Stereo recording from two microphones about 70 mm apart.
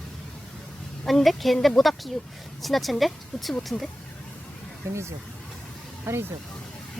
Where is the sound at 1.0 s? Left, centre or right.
Centre.